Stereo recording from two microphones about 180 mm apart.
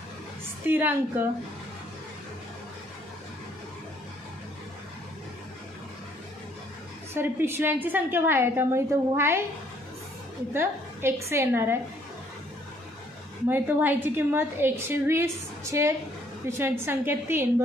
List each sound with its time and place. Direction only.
0.7 s a woman's voice: 10° right (ahead or behind)
7.2 s a woman's voice: 10° right (ahead or behind)
10.5 s a woman's voice: 15° right (ahead or behind)
13.5 s a woman's voice: 10° right (ahead or behind)